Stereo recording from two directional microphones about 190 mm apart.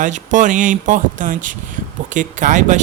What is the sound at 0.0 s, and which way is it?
Speech, 40° right (ahead or behind).